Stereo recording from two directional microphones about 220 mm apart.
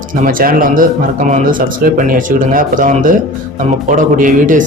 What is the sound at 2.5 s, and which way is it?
Speech, 40° right (ahead or behind).